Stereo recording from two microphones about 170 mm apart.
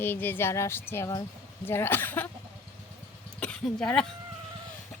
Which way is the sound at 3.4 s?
5° left (ahead or behind).